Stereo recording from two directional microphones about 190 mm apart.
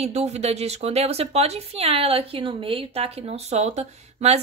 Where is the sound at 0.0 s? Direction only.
35° right (ahead or behind).